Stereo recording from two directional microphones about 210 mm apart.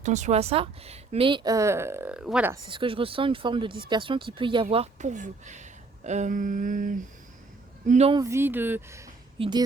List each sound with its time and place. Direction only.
0.0 s a woman's voice: 35° right (ahead or behind); by 2.6 s 5° right (ahead or behind)
2.6 s speech: 25° right (ahead or behind)
8.2 s a woman's voice: 10° right (ahead or behind)